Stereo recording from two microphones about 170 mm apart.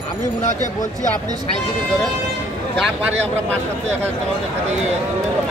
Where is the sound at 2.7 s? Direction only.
5° right (ahead or behind).